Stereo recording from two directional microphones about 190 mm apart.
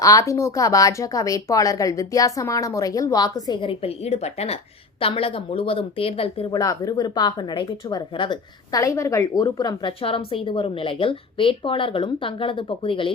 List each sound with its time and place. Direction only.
0.0 s a woman's voice: 15° left (ahead or behind)
6.6 s a woman's voice: 20° left (ahead or behind)